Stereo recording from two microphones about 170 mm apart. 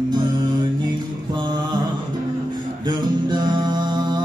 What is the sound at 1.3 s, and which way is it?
Mantra, 25° right (ahead or behind).